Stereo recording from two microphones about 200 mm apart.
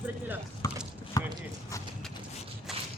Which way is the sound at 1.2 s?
20° left (ahead or behind).